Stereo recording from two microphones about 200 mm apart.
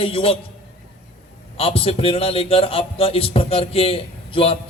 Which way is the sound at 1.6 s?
30° left (ahead or behind).